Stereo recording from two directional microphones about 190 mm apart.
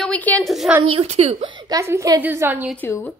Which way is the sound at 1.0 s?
35° right (ahead or behind).